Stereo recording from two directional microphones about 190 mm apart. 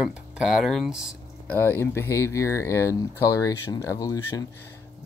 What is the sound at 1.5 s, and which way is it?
Speech, 10° left (ahead or behind).